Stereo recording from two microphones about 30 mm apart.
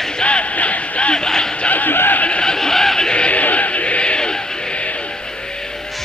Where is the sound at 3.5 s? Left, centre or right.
Left.